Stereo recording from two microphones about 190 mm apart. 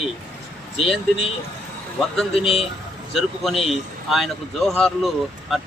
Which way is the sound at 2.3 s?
30° left (ahead or behind).